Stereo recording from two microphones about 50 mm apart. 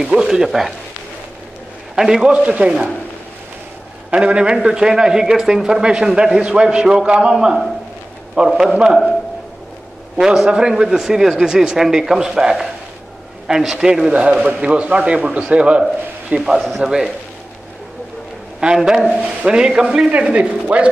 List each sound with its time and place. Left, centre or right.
0.0 s a man's voice: centre
2.0 s a man's voice: centre
2.3 s a man's voice: right
4.1 s a man's voice: right
8.5 s a man's voice: centre
10.2 s a man's voice: centre
16.3 s a man's voice: centre
18.8 s a man's voice: centre
19.1 s a man's voice: right